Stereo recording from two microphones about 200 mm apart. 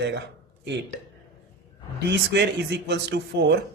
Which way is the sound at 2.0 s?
60° right (ahead or behind).